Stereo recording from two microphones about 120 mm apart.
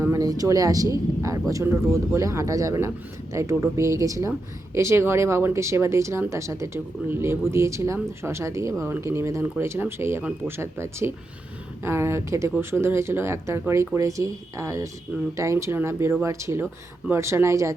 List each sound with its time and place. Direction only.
0.0 s speech: 25° right (ahead or behind)